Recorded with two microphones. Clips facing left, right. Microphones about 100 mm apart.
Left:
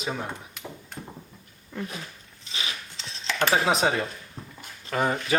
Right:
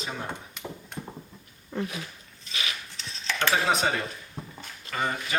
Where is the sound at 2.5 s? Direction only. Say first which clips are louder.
Even; 25° left (ahead or behind).